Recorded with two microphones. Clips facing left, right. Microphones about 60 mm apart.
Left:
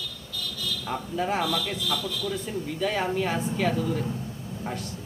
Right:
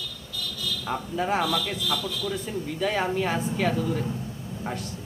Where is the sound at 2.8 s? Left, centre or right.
Centre.